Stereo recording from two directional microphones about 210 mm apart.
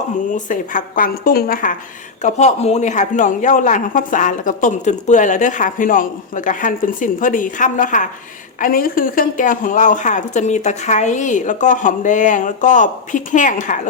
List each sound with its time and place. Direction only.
0.3 s a woman's voice: 40° left (ahead or behind)
2.2 s speech: 35° left (ahead or behind)